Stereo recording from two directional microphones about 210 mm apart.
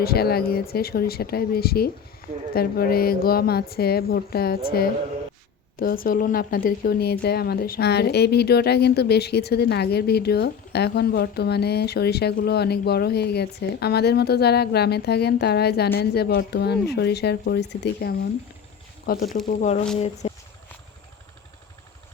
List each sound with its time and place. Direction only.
0.0 s speech: 45° left (ahead or behind)
19.5 s speech: 30° left (ahead or behind)